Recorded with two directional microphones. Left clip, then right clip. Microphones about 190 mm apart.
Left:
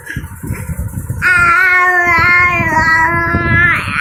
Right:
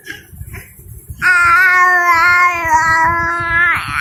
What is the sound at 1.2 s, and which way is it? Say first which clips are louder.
Child singing: even; 45° right (ahead or behind).